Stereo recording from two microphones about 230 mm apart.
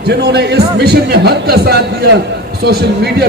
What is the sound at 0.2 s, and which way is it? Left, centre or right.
A man's voice, right.